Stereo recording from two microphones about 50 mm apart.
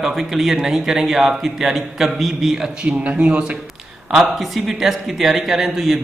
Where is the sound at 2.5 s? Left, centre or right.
Centre.